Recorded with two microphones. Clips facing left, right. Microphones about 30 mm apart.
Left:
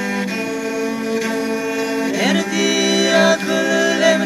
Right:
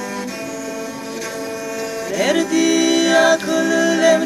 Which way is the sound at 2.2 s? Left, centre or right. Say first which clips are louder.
Right 4 dB; centre.